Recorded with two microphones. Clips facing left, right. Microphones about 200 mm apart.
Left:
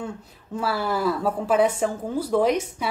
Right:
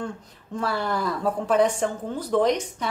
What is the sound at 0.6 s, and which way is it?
Speech, 5° left (ahead or behind).